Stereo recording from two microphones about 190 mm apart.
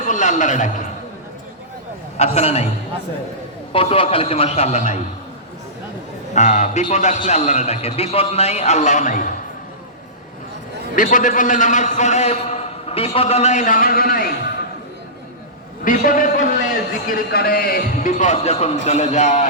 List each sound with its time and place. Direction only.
0.1 s a man's voice: 40° left (ahead or behind)
2.1 s a man's voice: 35° left (ahead or behind)
3.7 s a man's voice: 30° left (ahead or behind)
6.3 s a man's voice: 40° left (ahead or behind)
10.9 s a man's voice: 45° left (ahead or behind)
15.8 s a man's voice: 45° left (ahead or behind)